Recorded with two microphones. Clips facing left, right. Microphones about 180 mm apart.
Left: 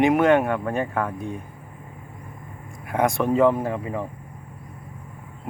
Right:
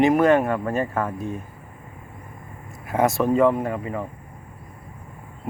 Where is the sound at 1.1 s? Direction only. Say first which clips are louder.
Right 1 dB; 15° left (ahead or behind).